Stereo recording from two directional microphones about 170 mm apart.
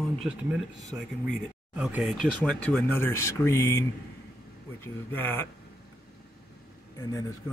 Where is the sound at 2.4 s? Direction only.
10° left (ahead or behind).